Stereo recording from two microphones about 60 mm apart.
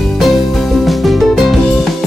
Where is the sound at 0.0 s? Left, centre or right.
Centre.